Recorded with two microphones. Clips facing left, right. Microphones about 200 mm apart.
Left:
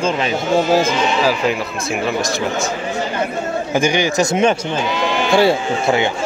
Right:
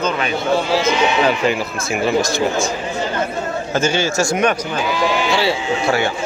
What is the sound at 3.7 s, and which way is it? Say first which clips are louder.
Speech: left 2 dB; 15° left (ahead or behind).